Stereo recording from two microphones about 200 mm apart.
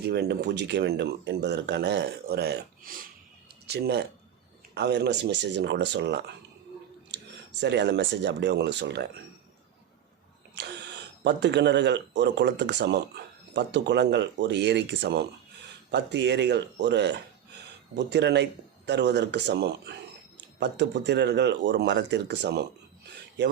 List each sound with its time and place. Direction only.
0.0 s speech: 55° right (ahead or behind)
7.1 s a sound: 60° right (ahead or behind)
7.6 s speech: 60° right (ahead or behind)
10.5 s speech: 60° right (ahead or behind)